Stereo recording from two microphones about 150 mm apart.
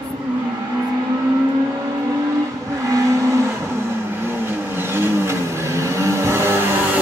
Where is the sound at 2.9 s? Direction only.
20° right (ahead or behind).